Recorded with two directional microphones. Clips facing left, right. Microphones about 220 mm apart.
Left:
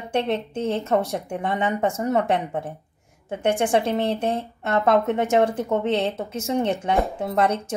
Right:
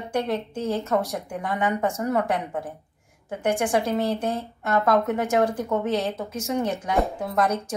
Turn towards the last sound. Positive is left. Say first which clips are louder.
# left 2 dB
turn(degrees=25)  # may be behind; listen again after turning